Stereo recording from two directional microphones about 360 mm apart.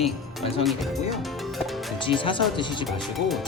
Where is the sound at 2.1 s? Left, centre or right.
Centre.